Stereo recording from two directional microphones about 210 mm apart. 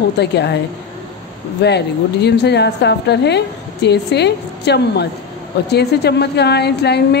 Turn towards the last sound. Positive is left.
turn(degrees=50)  # may be behind; listen again after turning